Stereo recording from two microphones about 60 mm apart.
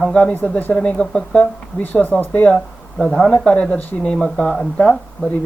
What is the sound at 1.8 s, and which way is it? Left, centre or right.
Speech, left.